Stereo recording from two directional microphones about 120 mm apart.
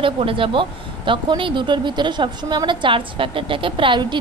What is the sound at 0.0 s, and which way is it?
Speech, 45° right (ahead or behind).